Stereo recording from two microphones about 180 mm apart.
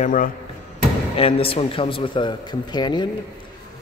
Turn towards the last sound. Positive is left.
turn(degrees=25)  # may be behind; listen again after turning